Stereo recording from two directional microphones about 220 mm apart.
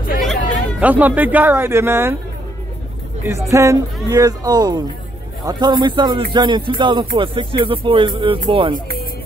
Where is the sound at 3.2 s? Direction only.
15° right (ahead or behind).